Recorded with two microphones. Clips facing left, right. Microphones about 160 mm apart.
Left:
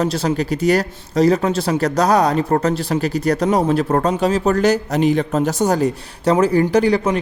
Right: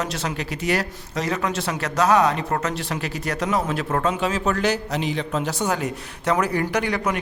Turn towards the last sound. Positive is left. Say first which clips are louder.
# left 8 dB
turn(degrees=30)  # may be behind; listen again after turning